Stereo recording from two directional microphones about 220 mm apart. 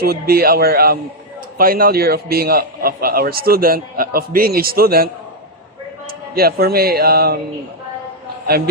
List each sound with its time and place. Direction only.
0.0 s a man's voice: 45° right (ahead or behind)
6.1 s speech: 45° right (ahead or behind)